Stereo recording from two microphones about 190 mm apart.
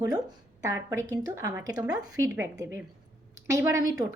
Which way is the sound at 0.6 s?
15° right (ahead or behind).